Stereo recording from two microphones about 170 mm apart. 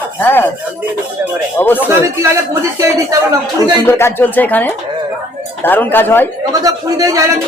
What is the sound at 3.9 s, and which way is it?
Speech, 15° left (ahead or behind).